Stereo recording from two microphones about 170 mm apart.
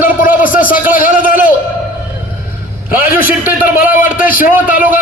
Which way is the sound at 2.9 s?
55° left (ahead or behind).